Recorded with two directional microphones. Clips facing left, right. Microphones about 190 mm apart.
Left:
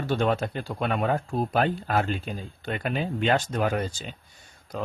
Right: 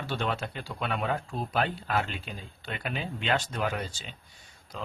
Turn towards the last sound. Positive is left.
turn(degrees=50)  # may be behind; listen again after turning